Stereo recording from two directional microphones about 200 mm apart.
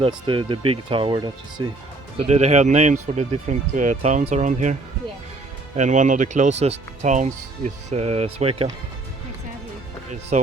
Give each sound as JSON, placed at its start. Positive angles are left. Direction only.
{"t": 0.0, "sound": "speech", "side_deg": -25}
{"t": 10.1, "sound": "speech", "side_deg": -35}